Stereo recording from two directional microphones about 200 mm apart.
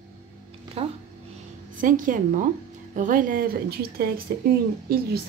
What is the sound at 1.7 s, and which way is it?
A woman's voice, 40° right (ahead or behind).